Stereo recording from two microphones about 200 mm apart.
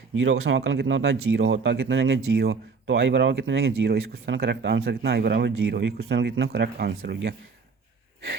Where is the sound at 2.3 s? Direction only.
55° right (ahead or behind); by 3.8 s 85° right.